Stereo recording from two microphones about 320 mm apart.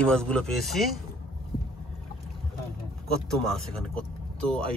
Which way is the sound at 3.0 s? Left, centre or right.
Centre.